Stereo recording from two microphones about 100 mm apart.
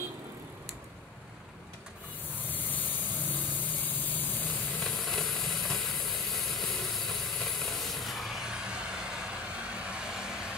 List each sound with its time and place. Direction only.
2.5 s vehicle: 20° left (ahead or behind)
4.8 s vehicle: 5° left (ahead or behind)